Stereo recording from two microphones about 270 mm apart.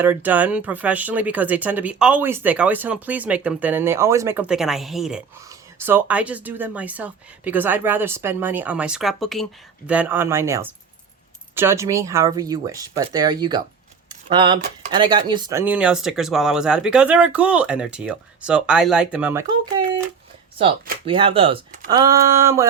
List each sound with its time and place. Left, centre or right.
0.0 s speech: centre
21.0 s speech: centre
21.8 s speech: centre